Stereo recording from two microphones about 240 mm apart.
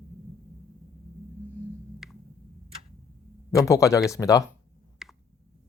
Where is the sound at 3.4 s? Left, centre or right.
Centre.